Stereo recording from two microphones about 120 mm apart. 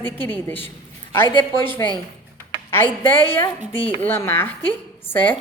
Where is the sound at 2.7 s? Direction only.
20° left (ahead or behind).